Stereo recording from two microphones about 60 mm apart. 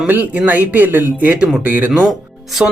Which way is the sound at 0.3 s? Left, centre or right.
Right.